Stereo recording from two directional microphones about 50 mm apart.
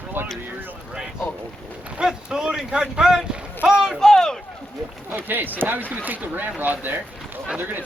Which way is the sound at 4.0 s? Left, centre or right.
Centre.